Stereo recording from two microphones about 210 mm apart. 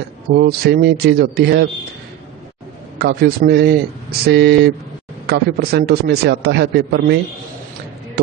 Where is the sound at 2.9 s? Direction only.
45° right (ahead or behind).